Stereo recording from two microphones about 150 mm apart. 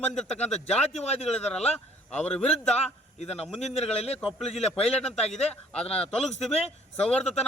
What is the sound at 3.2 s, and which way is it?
Speech, 45° left (ahead or behind).